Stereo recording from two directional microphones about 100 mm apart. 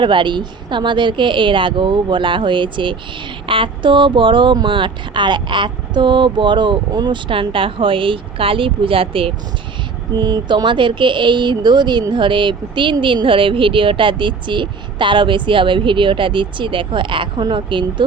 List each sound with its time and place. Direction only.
0.0 s speech: 55° right (ahead or behind)
10.2 s speech: 45° right (ahead or behind)